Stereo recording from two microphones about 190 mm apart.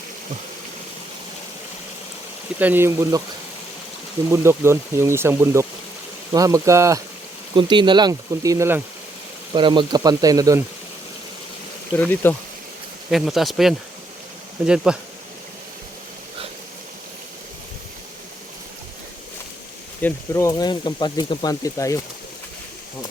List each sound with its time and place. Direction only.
2.6 s speech: 10° right (ahead or behind)
4.3 s speech: 15° right (ahead or behind)
9.5 s speech: 25° right (ahead or behind)
11.9 s speech: 10° left (ahead or behind)
13.1 s speech: centre (ahead or behind)
20.0 s speech: 10° left (ahead or behind)